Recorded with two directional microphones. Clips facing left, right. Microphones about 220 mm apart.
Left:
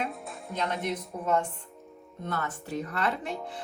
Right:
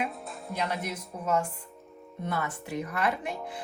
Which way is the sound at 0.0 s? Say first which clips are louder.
Right 1 dB; centre (ahead or behind).